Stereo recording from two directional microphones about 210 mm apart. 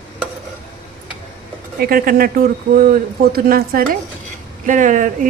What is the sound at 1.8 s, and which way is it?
A woman's voice, 45° right (ahead or behind).